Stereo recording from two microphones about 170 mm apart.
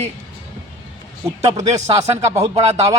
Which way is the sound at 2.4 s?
40° right (ahead or behind).